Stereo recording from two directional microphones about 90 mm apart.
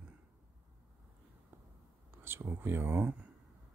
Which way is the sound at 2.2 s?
25° right (ahead or behind).